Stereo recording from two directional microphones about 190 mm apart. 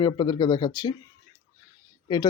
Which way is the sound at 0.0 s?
20° left (ahead or behind).